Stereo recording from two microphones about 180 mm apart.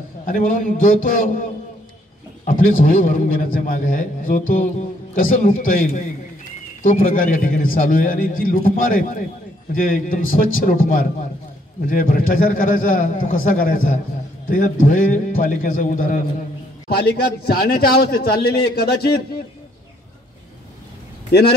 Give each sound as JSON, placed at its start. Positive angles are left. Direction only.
{"t": 0.3, "sound": "a man's voice", "side_deg": 45}
{"t": 16.9, "sound": "a man's voice", "side_deg": 60}
{"t": 21.3, "sound": "speech", "side_deg": 60}